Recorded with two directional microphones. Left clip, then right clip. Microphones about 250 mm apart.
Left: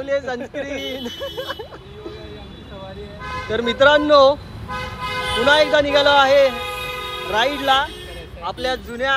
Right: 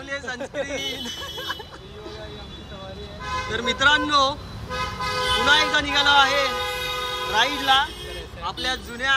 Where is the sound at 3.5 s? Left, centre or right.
Centre.